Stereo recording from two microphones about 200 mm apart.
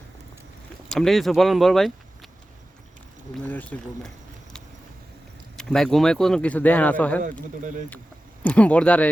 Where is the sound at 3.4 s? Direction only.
10° left (ahead or behind).